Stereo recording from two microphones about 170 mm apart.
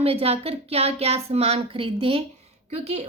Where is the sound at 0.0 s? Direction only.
35° right (ahead or behind).